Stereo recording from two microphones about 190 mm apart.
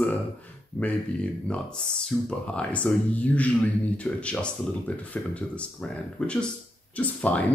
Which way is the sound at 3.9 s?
5° left (ahead or behind).